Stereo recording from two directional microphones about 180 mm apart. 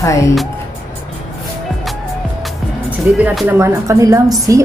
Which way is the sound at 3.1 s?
5° right (ahead or behind).